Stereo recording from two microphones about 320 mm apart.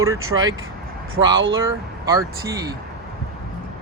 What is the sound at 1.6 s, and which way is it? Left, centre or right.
Speech, centre.